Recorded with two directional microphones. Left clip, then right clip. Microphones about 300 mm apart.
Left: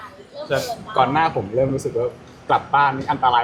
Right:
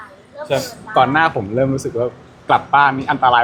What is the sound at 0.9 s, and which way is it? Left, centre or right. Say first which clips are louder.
A man's voice: right 4 dB; right.